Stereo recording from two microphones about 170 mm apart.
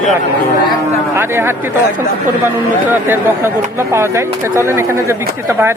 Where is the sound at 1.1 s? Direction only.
15° right (ahead or behind).